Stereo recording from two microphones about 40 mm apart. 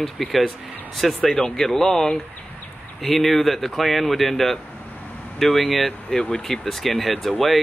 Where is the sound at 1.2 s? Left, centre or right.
Centre.